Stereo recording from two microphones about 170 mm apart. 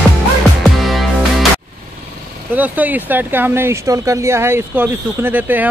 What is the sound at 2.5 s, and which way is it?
Speech, 10° right (ahead or behind).